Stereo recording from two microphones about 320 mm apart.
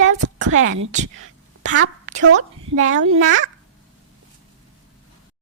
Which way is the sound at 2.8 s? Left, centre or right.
Right.